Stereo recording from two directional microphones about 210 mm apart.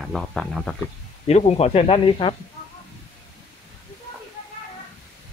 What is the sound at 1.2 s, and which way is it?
Speech, 30° left (ahead or behind).